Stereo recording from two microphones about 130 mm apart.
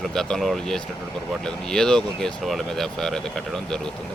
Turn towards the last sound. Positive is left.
turn(degrees=5)  # may be behind; listen again after turning